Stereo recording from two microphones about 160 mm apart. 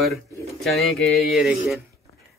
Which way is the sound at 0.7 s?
Centre (ahead or behind).